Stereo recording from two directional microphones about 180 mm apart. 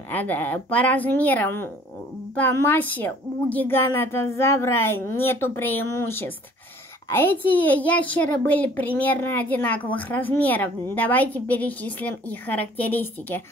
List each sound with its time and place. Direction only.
0.1 s a woman's voice: 10° left (ahead or behind)